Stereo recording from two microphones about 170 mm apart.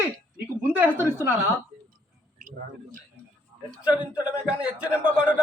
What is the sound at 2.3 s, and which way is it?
Speech, 55° right (ahead or behind).